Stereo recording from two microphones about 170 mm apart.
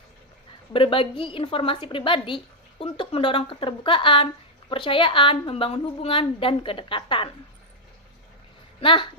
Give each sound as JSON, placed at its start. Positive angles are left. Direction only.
{"t": 0.7, "sound": "a woman's voice", "side_deg": 30}
{"t": 8.8, "sound": "speech", "side_deg": 30}